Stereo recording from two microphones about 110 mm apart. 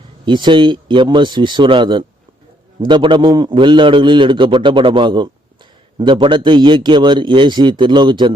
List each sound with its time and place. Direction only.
0.3 s a man's voice: 45° right (ahead or behind)